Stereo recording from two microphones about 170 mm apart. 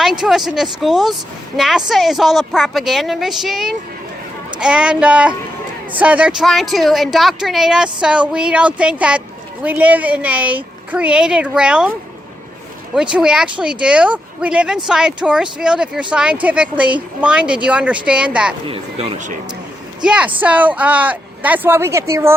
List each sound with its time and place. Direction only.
0.0 s a woman's voice: centre (ahead or behind)
18.7 s speech: 35° right (ahead or behind)
20.0 s speech: 5° right (ahead or behind)